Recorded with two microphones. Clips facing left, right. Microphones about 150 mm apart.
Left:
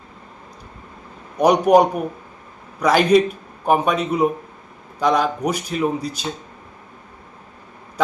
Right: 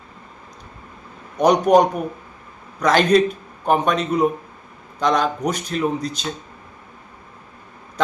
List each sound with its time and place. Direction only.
1.4 s a man's voice: 10° left (ahead or behind)